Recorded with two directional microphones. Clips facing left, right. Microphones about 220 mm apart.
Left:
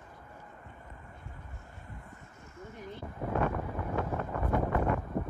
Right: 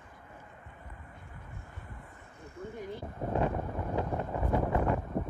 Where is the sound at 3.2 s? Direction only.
20° right (ahead or behind).